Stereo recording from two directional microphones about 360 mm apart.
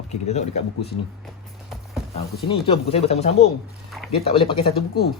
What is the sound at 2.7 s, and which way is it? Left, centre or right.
Speech, centre.